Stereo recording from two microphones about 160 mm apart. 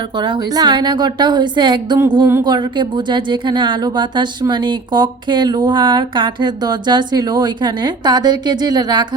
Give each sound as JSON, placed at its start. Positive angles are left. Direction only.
{"t": 0.2, "sound": "a woman's voice", "side_deg": -25}